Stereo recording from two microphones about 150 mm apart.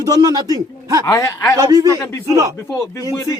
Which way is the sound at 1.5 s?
25° right (ahead or behind).